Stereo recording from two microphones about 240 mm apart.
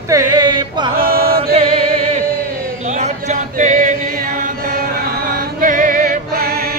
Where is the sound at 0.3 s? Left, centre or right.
Centre.